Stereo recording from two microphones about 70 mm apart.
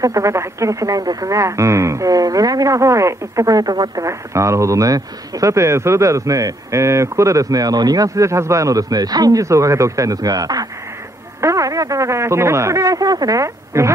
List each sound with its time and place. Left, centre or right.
0.0 s speech: right
11.4 s speech: right